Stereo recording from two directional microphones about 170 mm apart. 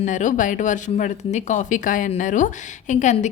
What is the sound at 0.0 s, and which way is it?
Speech, 45° left (ahead or behind).